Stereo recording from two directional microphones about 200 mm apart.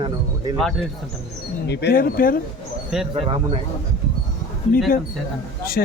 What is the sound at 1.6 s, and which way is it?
Speech, 55° left (ahead or behind).